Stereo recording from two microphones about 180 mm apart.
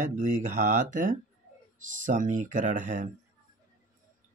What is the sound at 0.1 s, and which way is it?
Speech, 45° right (ahead or behind).